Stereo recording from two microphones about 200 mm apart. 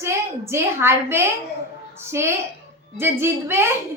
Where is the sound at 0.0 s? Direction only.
15° right (ahead or behind).